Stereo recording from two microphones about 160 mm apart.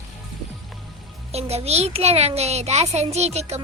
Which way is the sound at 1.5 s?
40° right (ahead or behind).